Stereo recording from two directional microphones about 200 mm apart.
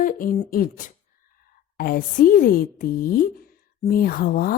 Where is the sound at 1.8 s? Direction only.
45° left (ahead or behind).